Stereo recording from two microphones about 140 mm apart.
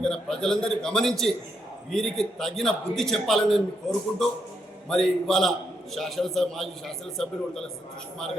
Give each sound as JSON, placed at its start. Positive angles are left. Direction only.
{"t": 0.0, "sound": "a man's voice", "side_deg": 5}